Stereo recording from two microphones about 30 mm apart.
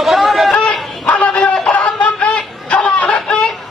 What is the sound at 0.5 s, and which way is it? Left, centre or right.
Bow-wow, left.